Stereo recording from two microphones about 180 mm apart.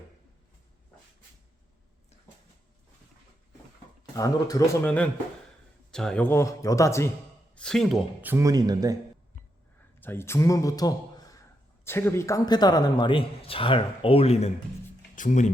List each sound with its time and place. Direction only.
4.1 s a man's voice: 20° left (ahead or behind)
5.9 s speech: 5° left (ahead or behind)
7.5 s speech: 5° left (ahead or behind)
8.3 s speech: 15° right (ahead or behind)
10.0 s a man's voice: 15° left (ahead or behind); by 15.4 s 45° left (ahead or behind)